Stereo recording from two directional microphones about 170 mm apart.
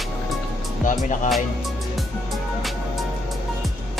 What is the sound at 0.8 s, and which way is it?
Speech, 45° left (ahead or behind).